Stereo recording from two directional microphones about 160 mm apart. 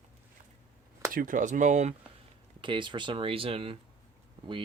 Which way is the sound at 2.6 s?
30° right (ahead or behind).